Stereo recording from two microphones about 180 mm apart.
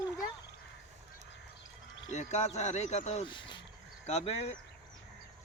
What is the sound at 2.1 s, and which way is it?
Speech, 40° left (ahead or behind).